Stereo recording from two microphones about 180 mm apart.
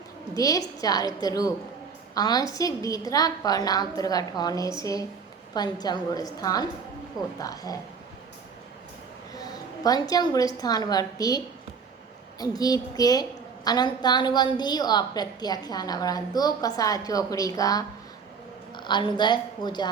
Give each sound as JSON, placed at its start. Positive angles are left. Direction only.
{"t": 0.3, "sound": "a woman's voice", "side_deg": 20}
{"t": 9.3, "sound": "a woman's voice", "side_deg": 20}